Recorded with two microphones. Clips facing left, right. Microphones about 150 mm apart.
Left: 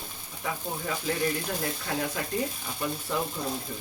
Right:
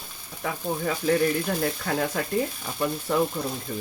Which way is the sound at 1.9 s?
60° right (ahead or behind).